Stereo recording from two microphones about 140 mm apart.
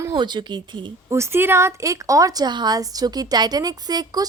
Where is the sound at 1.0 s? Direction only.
20° right (ahead or behind).